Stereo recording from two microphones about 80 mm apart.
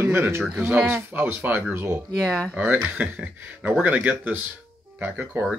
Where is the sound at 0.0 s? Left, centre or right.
Right.